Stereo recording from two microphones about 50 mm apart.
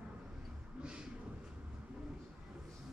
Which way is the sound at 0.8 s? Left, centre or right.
Centre.